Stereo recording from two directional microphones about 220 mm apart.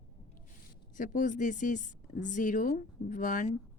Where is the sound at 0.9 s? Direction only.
35° left (ahead or behind).